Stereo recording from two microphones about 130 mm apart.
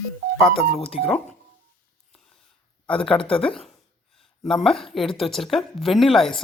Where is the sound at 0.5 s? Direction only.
45° left (ahead or behind).